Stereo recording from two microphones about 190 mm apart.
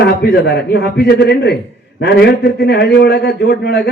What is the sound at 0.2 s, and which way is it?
A man's voice, 60° left (ahead or behind).